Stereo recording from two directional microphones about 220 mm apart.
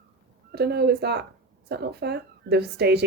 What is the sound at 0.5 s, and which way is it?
Speech, 45° right (ahead or behind).